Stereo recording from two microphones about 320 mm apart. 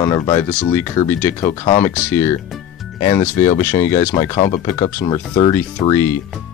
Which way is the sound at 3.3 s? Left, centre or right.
Left.